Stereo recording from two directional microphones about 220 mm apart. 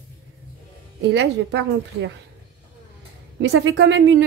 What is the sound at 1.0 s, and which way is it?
A woman's voice, 50° right (ahead or behind).